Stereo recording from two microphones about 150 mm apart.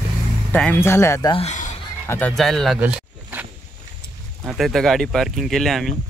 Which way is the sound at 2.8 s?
10° right (ahead or behind).